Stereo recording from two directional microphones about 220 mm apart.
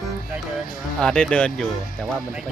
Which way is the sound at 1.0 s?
5° left (ahead or behind).